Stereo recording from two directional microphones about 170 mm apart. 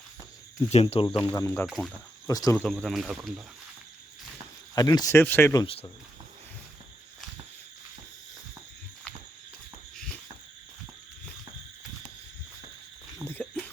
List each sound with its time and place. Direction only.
0.7 s speech: 35° left (ahead or behind)
1.1 s speech: 15° left (ahead or behind)
1.6 s speech: centre (ahead or behind)
2.2 s speech: 20° left (ahead or behind)
2.7 s speech: centre (ahead or behind)
4.7 s speech: 25° left (ahead or behind)
5.6 s speech: 35° left (ahead or behind)
13.2 s a sound: 10° left (ahead or behind)